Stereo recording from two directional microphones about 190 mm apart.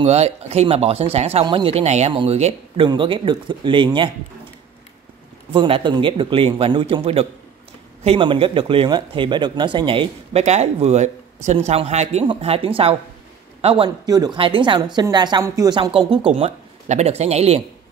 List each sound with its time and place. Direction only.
0.0 s a woman's voice: 35° right (ahead or behind)
5.5 s a woman's voice: 25° right (ahead or behind)